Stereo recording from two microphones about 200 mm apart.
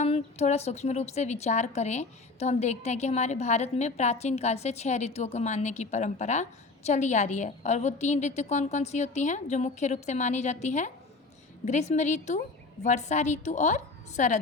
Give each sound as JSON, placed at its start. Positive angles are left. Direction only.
{"t": 0.0, "sound": "a woman's voice", "side_deg": 35}